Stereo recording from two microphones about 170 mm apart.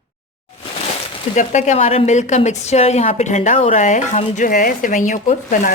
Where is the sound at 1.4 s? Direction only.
45° left (ahead or behind).